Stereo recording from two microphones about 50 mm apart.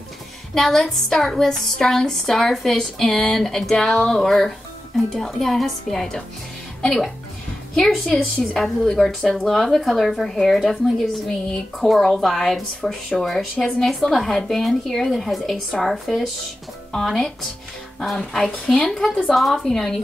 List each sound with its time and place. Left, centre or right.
0.6 s a woman's voice: centre
18.1 s a woman's voice: centre